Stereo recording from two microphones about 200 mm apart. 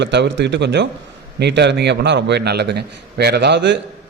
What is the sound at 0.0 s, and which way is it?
A man's voice, 60° right (ahead or behind).